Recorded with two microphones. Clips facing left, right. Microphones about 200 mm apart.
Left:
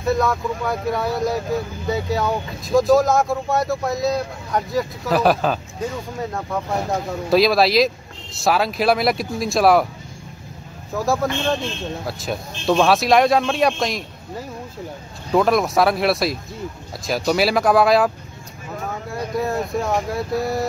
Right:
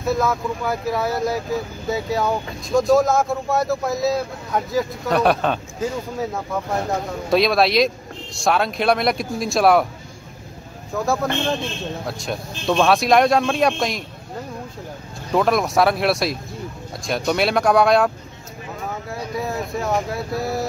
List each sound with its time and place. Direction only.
0.0 s speech: centre (ahead or behind)
11.0 s speech: centre (ahead or behind)
15.3 s speech: centre (ahead or behind)